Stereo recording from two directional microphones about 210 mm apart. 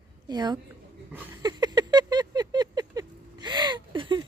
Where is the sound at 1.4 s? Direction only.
20° right (ahead or behind).